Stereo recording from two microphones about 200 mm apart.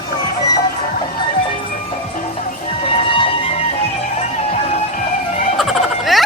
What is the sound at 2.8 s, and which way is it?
Music, 25° left (ahead or behind).